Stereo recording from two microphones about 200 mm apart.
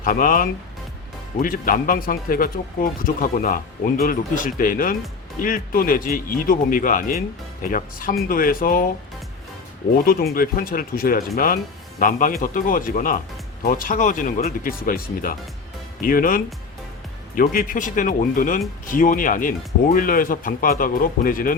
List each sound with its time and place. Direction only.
0.0 s speech: 45° left (ahead or behind)
10.0 s speech: 50° left (ahead or behind)